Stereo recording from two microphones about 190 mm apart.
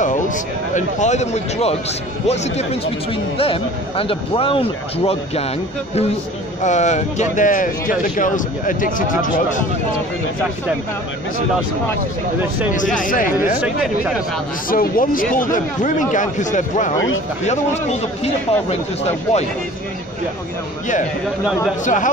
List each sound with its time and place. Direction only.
0.0 s a man's voice: 40° left (ahead or behind)
6.6 s a man's voice: 40° left (ahead or behind)
12.7 s speech: 45° left (ahead or behind)
13.6 s speech: 5° right (ahead or behind)
14.7 s a man's voice: 45° left (ahead or behind)
21.8 s speech: 45° left (ahead or behind)